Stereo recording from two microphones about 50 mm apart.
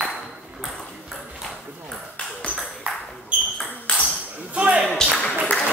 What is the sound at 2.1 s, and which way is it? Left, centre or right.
Ping, left.